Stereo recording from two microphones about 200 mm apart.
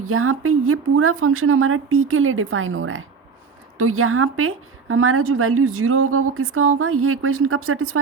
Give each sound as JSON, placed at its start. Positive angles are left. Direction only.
{"t": 0.0, "sound": "a woman's voice", "side_deg": -90}